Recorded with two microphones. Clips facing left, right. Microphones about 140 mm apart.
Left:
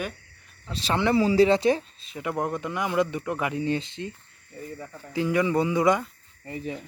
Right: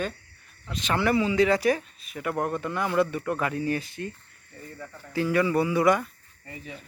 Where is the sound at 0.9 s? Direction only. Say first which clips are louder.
Left 1 dB; 20° left (ahead or behind).